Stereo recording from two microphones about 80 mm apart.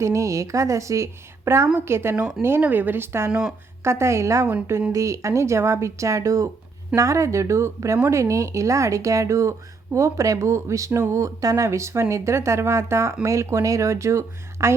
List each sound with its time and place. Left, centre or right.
0.0 s speech: right